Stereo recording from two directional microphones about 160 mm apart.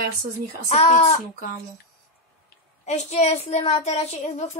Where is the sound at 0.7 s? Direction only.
45° left (ahead or behind).